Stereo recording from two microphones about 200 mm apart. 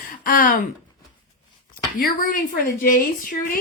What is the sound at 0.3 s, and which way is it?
Speech, 40° left (ahead or behind).